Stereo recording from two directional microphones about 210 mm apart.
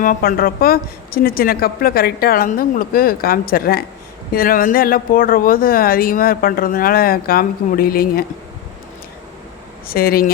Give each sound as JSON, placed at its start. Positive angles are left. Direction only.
{"t": 0.0, "sound": "speech", "side_deg": 40}
{"t": 9.8, "sound": "speech", "side_deg": 45}